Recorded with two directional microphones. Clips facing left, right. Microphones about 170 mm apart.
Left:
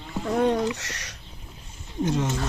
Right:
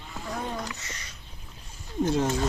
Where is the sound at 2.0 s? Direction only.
30° right (ahead or behind).